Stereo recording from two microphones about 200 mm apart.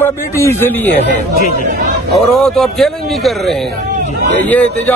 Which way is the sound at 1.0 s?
55° right (ahead or behind).